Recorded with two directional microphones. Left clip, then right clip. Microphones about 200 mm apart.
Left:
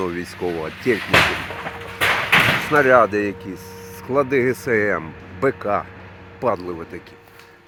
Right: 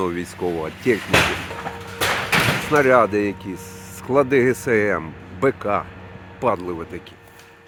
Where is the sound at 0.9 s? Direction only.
30° right (ahead or behind).